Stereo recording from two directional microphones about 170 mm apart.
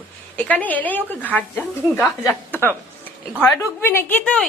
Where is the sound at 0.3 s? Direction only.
10° left (ahead or behind).